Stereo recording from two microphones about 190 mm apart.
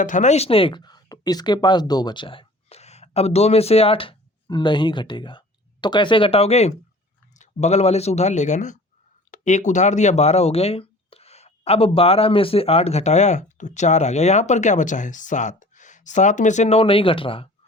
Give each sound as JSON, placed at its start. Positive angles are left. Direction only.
{"t": 0.0, "sound": "speech", "side_deg": 40}